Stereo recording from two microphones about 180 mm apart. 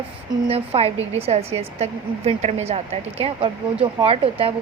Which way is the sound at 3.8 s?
30° right (ahead or behind).